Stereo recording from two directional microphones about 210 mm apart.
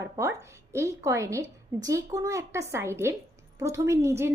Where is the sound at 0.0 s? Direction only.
15° right (ahead or behind).